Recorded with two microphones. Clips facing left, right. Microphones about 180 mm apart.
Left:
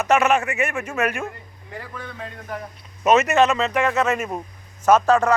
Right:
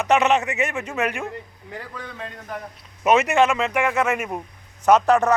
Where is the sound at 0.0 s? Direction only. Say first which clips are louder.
Even; 20° right (ahead or behind).